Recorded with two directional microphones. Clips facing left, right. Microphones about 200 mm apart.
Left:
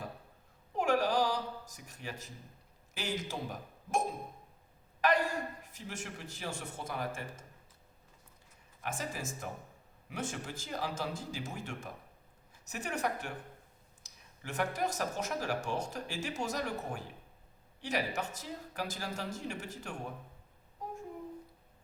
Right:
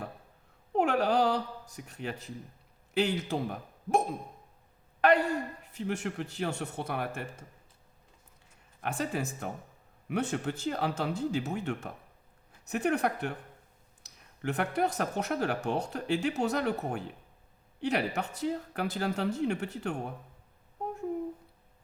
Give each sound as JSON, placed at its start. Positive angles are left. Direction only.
{"t": 0.8, "sound": "a sound", "side_deg": -60}
{"t": 2.9, "sound": "a man's voice", "side_deg": -60}
{"t": 4.9, "sound": "speech", "side_deg": -60}
{"t": 8.8, "sound": "speech", "side_deg": -65}